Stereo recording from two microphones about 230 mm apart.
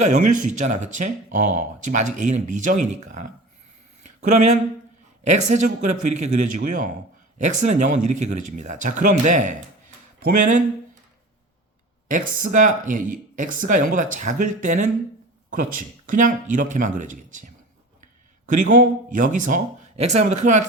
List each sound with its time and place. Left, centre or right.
0.0 s speech: right
12.0 s speech: right